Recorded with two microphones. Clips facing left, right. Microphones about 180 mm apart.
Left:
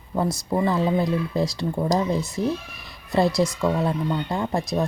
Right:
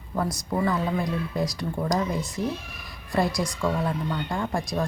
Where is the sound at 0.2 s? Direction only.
25° left (ahead or behind).